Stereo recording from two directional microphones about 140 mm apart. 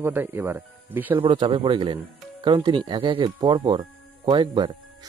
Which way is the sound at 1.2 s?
35° right (ahead or behind).